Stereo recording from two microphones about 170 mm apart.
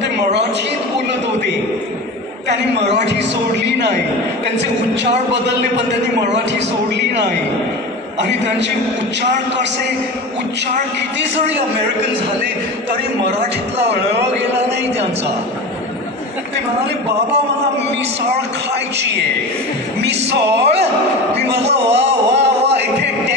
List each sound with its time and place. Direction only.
2.4 s a woman's voice: 90° right
5.3 s a woman's voice: 90° right
9.2 s music: 85° right
20.0 s music: 85° right
20.7 s speech: 40° right (ahead or behind)
21.9 s a sound: 90° right